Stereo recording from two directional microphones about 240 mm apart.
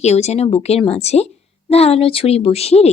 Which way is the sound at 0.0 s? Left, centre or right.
Left.